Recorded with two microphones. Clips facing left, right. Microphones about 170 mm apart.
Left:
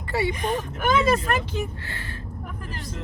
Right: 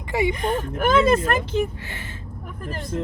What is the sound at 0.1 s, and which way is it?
Speech, 15° right (ahead or behind).